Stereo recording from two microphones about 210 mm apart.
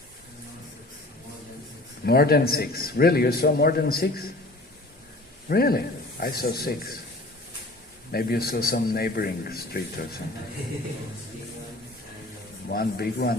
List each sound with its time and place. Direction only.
2.0 s a man's voice: 45° left (ahead or behind)
5.5 s a man's voice: 45° left (ahead or behind)
8.1 s a man's voice: 45° left (ahead or behind)
12.6 s a man's voice: 45° left (ahead or behind)